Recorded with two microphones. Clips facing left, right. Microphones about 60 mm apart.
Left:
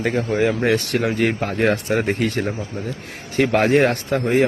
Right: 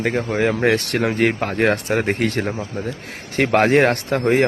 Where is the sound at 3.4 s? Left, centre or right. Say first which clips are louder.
Right 1 dB; right.